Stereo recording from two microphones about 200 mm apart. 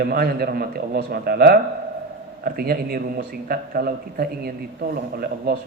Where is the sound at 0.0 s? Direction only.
50° right (ahead or behind).